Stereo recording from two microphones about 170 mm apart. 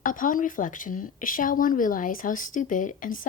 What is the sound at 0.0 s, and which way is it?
Speech, 50° left (ahead or behind).